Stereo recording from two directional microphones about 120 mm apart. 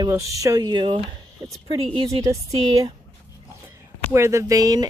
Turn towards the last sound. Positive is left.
turn(degrees=-30)  # may be behind; listen again after turning